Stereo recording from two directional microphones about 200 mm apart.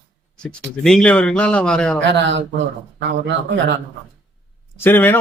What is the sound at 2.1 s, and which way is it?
Speech, 65° right (ahead or behind).